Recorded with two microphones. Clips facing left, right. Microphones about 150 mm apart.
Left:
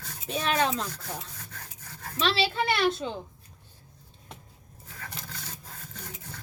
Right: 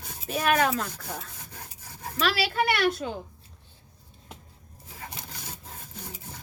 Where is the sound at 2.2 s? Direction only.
25° left (ahead or behind).